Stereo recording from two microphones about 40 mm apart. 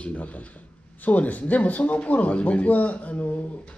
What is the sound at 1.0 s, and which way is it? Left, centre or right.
A man's voice, left.